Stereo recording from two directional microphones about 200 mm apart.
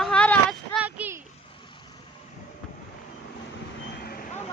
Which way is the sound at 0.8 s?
10° right (ahead or behind).